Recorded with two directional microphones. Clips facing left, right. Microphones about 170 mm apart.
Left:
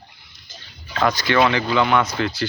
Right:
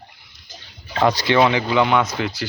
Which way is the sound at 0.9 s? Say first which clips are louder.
Right 2 dB; 30° right (ahead or behind).